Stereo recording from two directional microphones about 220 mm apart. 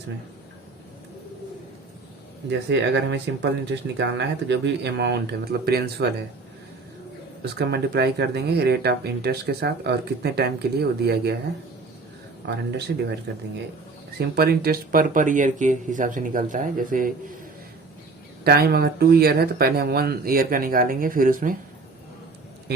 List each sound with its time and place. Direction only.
2.5 s speech: 50° right (ahead or behind)
7.6 s speech: 50° right (ahead or behind)
12.5 s speech: 50° right (ahead or behind)
14.2 s speech: 45° right (ahead or behind)
18.4 s speech: 45° right (ahead or behind)